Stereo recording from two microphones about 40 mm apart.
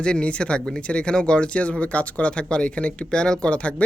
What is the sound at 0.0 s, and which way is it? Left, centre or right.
Speech, left.